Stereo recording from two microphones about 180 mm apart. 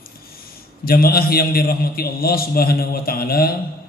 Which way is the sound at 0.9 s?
55° left (ahead or behind).